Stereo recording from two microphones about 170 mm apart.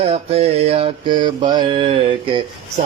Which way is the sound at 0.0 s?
35° right (ahead or behind).